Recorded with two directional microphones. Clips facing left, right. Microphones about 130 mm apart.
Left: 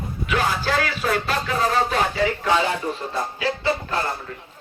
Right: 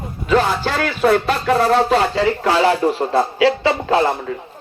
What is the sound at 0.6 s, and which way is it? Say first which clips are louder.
Speech: right 6 dB; 55° right (ahead or behind).